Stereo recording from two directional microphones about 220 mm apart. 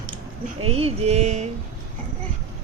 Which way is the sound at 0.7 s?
25° right (ahead or behind).